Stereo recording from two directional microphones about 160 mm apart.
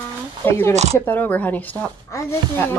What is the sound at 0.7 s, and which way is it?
Speech, 45° right (ahead or behind).